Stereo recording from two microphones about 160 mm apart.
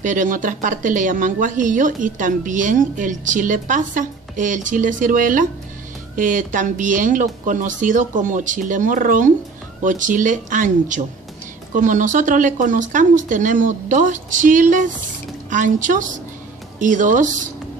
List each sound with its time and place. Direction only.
0.0 s speech: 50° right (ahead or behind)